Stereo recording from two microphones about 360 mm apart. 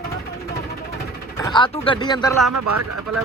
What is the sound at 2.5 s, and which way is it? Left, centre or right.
Speech, right.